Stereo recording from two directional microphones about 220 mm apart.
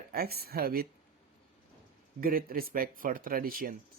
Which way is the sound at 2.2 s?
40° right (ahead or behind).